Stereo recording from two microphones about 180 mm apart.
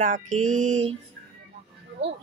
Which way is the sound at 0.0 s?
45° right (ahead or behind).